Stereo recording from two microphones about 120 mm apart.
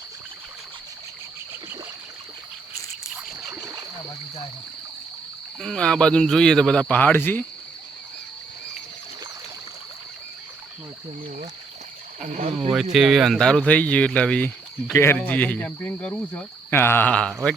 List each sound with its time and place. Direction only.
3.5 s rowboat: 20° right (ahead or behind)
5.5 s speech: 5° left (ahead or behind)
12.2 s speech: 70° right (ahead or behind)
12.7 s speech: 5° right (ahead or behind)
14.9 s speech: 20° left (ahead or behind)